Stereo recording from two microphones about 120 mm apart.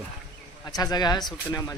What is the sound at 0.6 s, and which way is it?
Speech, 30° left (ahead or behind).